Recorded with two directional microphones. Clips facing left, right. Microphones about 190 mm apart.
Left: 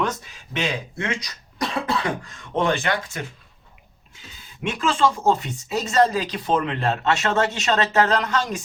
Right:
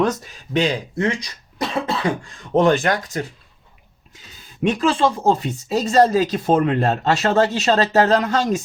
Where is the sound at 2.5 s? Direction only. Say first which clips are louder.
Right 6 dB; 40° right (ahead or behind).